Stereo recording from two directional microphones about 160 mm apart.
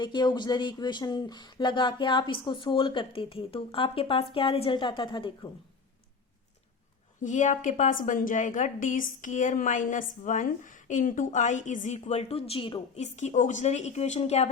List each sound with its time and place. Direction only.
0.0 s speech: 25° left (ahead or behind)
7.2 s a woman's voice: 50° left (ahead or behind); by 13.1 s 35° left (ahead or behind)
13.1 s a woman's voice: 45° left (ahead or behind)